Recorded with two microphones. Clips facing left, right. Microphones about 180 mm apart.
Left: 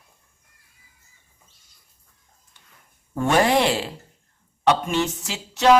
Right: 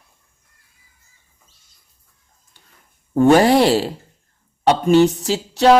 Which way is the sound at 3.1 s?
35° right (ahead or behind).